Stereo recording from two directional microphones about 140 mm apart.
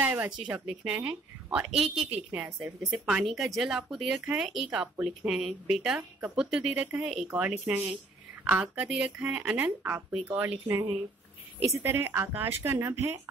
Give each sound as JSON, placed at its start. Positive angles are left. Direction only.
{"t": 0.0, "sound": "a woman's voice", "side_deg": -10}